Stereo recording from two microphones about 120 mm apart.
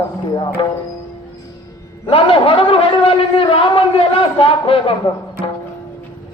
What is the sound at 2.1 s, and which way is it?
A man's voice, 50° left (ahead or behind).